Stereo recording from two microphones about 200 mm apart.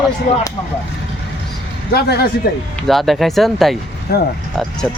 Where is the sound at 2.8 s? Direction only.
Centre (ahead or behind).